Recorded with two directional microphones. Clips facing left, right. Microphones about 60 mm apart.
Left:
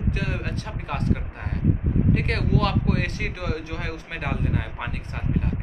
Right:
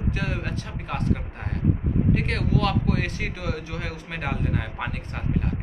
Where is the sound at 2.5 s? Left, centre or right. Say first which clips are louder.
Even; left.